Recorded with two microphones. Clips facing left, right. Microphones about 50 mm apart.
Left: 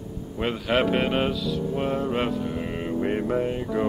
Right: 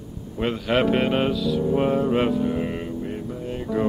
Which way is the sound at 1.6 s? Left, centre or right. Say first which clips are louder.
Right 6 dB; centre.